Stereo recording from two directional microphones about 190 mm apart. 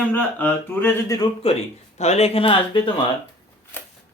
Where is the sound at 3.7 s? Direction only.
10° left (ahead or behind).